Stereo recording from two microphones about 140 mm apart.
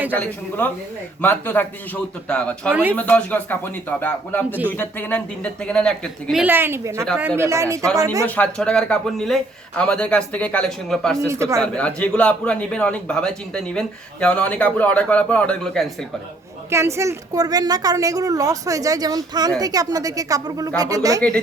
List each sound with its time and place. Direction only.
0.1 s a man's voice: 15° left (ahead or behind)
4.4 s a woman's voice: 10° right (ahead or behind)
4.8 s a man's voice: 15° left (ahead or behind)
6.4 s a woman's voice: 15° right (ahead or behind)
8.3 s a man's voice: 10° left (ahead or behind)
11.3 s a woman's voice: 20° right (ahead or behind)
11.6 s a man's voice: 10° left (ahead or behind)
16.6 s a woman's voice: 20° right (ahead or behind)
21.2 s a man's voice: 5° left (ahead or behind)